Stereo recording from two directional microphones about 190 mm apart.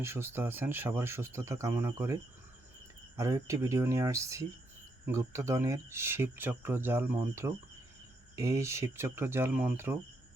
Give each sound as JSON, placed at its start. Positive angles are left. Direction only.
{"t": 0.0, "sound": "speech", "side_deg": -10}